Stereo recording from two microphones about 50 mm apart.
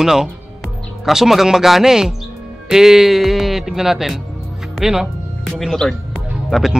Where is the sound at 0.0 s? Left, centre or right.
Centre.